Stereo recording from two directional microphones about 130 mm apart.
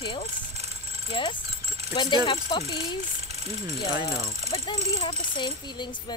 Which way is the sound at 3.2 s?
55° right (ahead or behind).